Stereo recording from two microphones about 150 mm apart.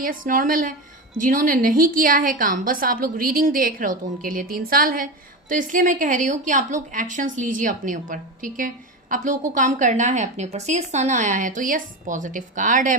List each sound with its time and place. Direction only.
0.0 s a woman's voice: 65° right (ahead or behind)